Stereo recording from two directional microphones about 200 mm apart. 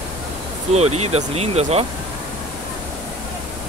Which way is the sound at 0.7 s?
30° right (ahead or behind).